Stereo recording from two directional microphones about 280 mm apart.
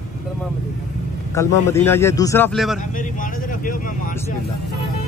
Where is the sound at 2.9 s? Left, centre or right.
Left.